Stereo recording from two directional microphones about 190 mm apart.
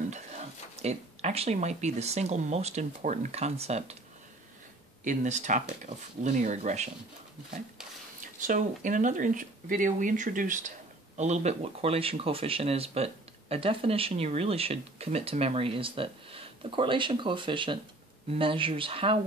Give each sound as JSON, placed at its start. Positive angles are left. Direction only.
{"t": 0.1, "sound": "speech", "side_deg": -35}
{"t": 5.0, "sound": "speech", "side_deg": -40}
{"t": 8.4, "sound": "speech", "side_deg": -45}